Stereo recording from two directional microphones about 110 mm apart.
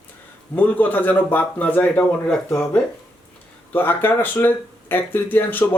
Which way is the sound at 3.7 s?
20° left (ahead or behind).